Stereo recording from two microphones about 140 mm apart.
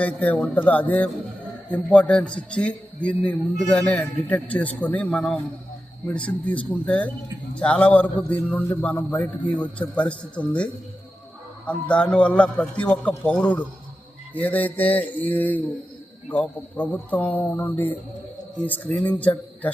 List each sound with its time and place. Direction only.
0.0 s a man's voice: 10° left (ahead or behind)